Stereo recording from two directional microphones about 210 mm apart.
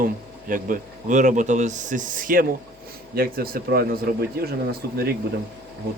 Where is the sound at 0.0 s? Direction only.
40° right (ahead or behind).